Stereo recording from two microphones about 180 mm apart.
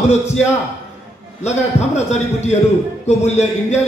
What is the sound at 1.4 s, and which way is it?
A man's voice, 40° left (ahead or behind).